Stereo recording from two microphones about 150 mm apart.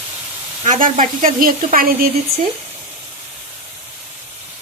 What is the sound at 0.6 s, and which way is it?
Speech, 60° right (ahead or behind).